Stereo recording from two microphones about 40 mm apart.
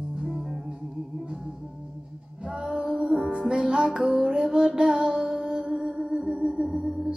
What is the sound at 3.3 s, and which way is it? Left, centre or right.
Music, right.